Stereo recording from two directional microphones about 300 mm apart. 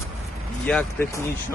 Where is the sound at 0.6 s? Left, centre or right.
Centre.